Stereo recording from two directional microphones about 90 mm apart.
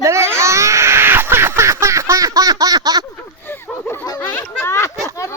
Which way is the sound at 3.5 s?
25° left (ahead or behind).